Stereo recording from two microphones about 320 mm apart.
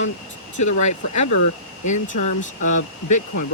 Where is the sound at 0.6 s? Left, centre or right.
Left.